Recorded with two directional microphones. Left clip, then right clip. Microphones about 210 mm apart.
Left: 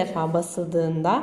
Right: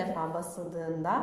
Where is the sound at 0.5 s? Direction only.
45° left (ahead or behind).